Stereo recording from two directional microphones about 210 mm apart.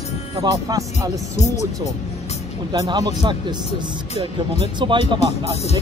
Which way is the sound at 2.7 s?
20° right (ahead or behind).